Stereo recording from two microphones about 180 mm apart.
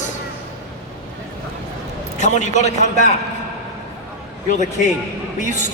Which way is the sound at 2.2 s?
40° left (ahead or behind).